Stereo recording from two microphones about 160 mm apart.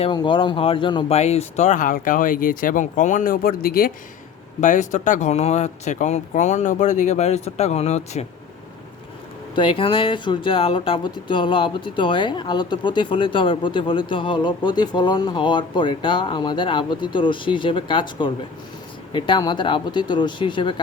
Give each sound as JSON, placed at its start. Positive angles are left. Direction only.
{"t": 0.0, "sound": "speech", "side_deg": 30}
{"t": 4.6, "sound": "speech", "side_deg": 50}
{"t": 9.6, "sound": "speech", "side_deg": 30}